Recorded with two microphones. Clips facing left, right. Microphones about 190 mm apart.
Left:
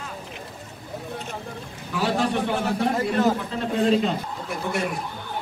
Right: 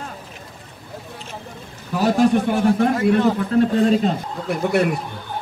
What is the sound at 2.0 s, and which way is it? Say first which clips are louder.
A man's voice: right 7 dB; 45° right (ahead or behind).